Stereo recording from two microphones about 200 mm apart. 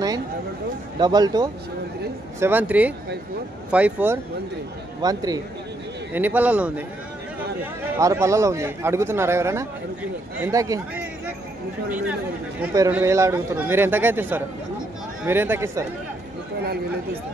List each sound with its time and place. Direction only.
0.9 s speech: 20° right (ahead or behind)
2.4 s a man's voice: 10° right (ahead or behind)
5.0 s speech: 20° right (ahead or behind)
6.1 s a man's voice: 10° right (ahead or behind)
8.0 s a man's voice: 15° right (ahead or behind)
16.6 s speech: 50° right (ahead or behind)